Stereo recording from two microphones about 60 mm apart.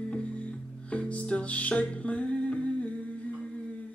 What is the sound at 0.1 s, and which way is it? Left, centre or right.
Music, left.